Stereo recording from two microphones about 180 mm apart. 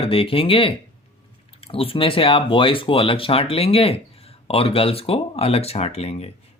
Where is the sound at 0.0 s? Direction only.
30° left (ahead or behind).